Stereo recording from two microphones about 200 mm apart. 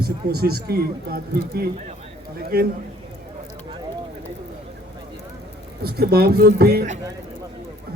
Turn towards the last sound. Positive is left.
turn(degrees=-50)  # may be behind; listen again after turning